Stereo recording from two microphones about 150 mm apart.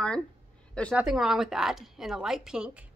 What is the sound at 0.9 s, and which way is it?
Speech, 5° right (ahead or behind).